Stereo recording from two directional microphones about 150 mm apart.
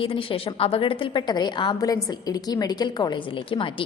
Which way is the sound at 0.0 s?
35° left (ahead or behind).